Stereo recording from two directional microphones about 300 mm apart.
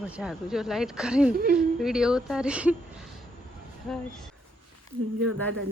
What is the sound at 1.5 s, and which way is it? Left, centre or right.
A woman's voice, centre.